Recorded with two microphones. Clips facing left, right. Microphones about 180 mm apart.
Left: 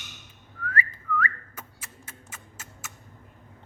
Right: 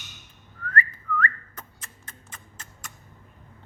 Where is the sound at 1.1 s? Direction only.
10° left (ahead or behind).